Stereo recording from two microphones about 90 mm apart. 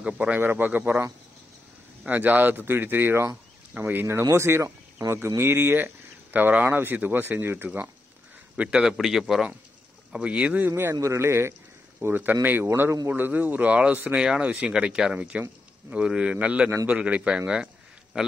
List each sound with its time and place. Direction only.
0.0 s speech: 15° right (ahead or behind)
2.0 s speech: 15° right (ahead or behind)
8.5 s a man's voice: 10° right (ahead or behind)
10.7 s speech: 30° right (ahead or behind)
14.1 s speech: 5° right (ahead or behind)